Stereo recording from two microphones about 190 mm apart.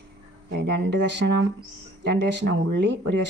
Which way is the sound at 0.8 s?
65° right (ahead or behind).